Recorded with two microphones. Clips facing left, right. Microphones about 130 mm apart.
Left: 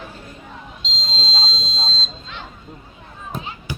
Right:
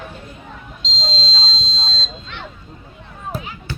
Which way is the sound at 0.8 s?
5° left (ahead or behind).